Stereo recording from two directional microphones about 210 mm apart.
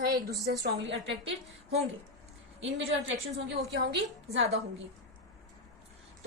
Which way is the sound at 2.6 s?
60° right (ahead or behind).